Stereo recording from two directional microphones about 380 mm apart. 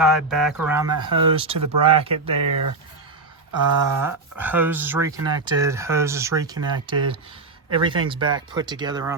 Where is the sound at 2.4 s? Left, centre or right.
Right.